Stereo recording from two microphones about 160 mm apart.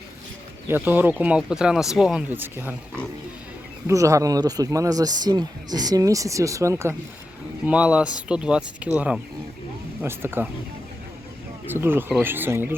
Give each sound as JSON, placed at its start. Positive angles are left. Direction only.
{"t": 0.7, "sound": "speech", "side_deg": -10}
{"t": 7.6, "sound": "speech", "side_deg": -5}
{"t": 11.6, "sound": "speech", "side_deg": -15}